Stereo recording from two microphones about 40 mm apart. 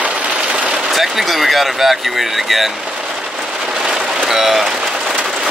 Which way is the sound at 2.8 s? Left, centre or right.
Centre.